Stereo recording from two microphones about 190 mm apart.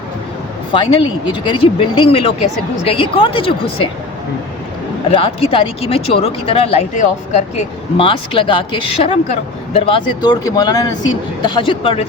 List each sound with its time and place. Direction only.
0.7 s speech: 25° left (ahead or behind)
5.1 s speech: 30° left (ahead or behind)